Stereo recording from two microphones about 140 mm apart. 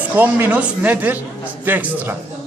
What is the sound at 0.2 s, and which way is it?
A man's voice, 15° right (ahead or behind).